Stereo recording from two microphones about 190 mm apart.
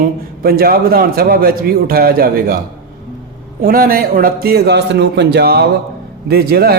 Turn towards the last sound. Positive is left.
turn(degrees=-55)  # may be behind; listen again after turning